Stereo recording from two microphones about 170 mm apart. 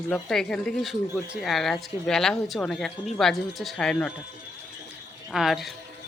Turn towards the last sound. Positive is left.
turn(degrees=0)  # may be behind; listen again after turning